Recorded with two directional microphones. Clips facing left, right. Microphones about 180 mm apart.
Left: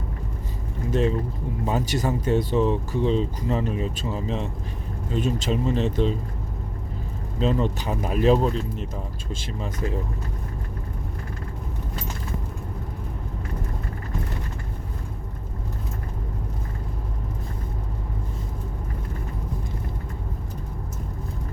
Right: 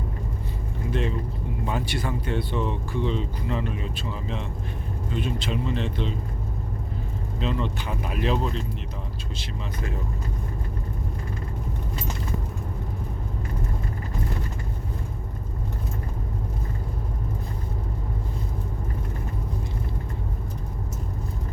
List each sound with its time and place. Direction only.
0.9 s speech: 40° left (ahead or behind)
7.3 s speech: 40° left (ahead or behind)